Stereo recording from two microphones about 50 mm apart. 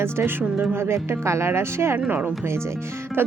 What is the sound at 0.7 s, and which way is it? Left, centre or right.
Speech, right.